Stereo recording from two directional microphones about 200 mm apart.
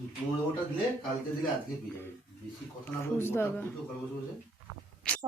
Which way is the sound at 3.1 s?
10° left (ahead or behind).